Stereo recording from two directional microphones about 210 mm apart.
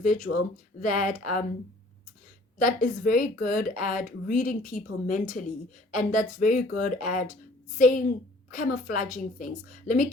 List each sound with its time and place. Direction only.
0.0 s speech: 35° left (ahead or behind)
2.6 s speech: 40° left (ahead or behind)